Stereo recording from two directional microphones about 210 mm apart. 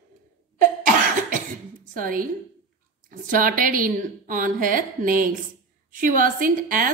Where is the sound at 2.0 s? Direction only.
40° right (ahead or behind).